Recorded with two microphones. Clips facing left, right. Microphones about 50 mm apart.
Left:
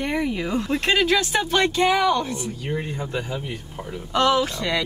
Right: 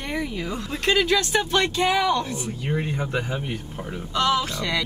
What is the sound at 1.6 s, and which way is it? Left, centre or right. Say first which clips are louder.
Speech: left 3 dB; left.